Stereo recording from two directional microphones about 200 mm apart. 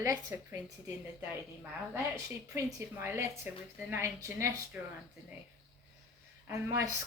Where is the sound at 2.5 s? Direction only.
15° right (ahead or behind).